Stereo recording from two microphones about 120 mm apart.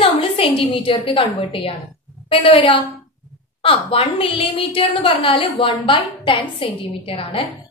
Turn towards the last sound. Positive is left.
turn(degrees=50)  # may be behind; listen again after turning